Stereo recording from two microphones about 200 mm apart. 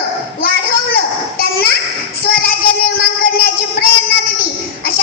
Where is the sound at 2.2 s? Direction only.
50° left (ahead or behind).